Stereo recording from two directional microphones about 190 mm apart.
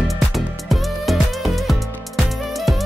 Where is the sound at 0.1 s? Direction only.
Centre (ahead or behind).